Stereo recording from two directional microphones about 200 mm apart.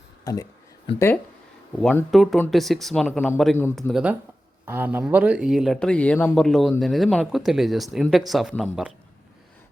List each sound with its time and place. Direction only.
0.3 s speech: 20° left (ahead or behind); by 8.9 s centre (ahead or behind)